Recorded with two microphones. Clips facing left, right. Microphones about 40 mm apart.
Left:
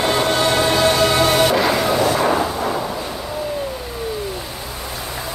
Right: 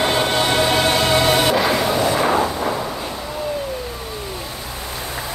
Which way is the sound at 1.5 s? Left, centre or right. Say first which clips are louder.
Left 1 dB; centre.